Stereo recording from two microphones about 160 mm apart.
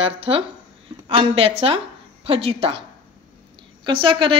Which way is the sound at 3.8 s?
30° right (ahead or behind).